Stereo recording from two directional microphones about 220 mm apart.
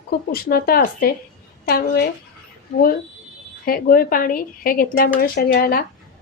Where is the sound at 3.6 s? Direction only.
40° left (ahead or behind).